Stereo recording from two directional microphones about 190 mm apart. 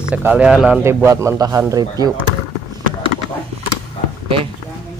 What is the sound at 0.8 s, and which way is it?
Speech, 15° right (ahead or behind).